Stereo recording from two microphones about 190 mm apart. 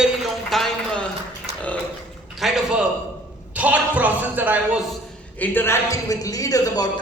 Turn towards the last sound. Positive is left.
turn(degrees=20)  # may be behind; listen again after turning